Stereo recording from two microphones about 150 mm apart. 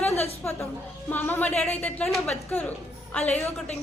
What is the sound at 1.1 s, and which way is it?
Speech, 10° left (ahead or behind).